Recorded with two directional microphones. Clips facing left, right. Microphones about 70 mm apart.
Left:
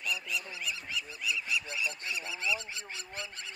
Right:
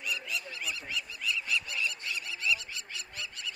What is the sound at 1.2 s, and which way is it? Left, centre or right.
Goose, centre.